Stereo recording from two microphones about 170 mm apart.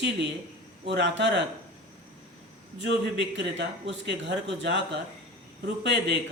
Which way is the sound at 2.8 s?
90° right.